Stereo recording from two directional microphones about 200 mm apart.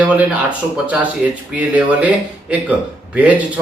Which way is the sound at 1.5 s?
5° right (ahead or behind).